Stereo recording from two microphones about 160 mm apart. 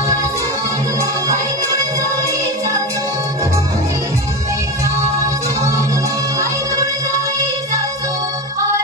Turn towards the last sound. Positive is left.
turn(degrees=-20)  # may be behind; listen again after turning